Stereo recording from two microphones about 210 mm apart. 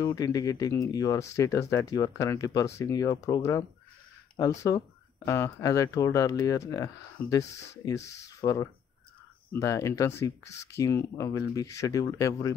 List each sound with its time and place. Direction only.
0.0 s speech: 15° left (ahead or behind)